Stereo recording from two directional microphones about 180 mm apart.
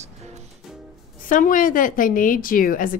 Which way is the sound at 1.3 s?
50° left (ahead or behind).